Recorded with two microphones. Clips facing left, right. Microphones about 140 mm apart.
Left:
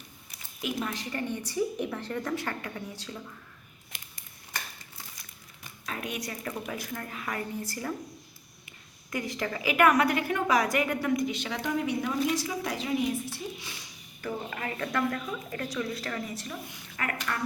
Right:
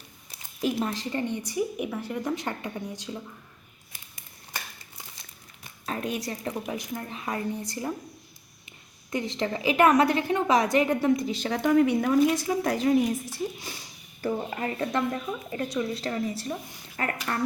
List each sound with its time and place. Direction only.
0.3 s a woman's voice: 30° right (ahead or behind)
1.4 s a woman's voice: 15° right (ahead or behind)
5.8 s a woman's voice: 35° right (ahead or behind); by 7.9 s 20° right (ahead or behind)
9.1 s a woman's voice: 25° right (ahead or behind)